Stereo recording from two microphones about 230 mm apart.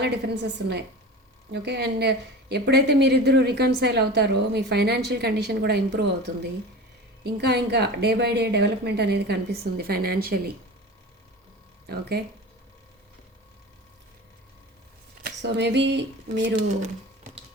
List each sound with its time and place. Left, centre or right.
0.0 s a woman's voice: right
11.9 s a woman's voice: right
15.2 s speech: right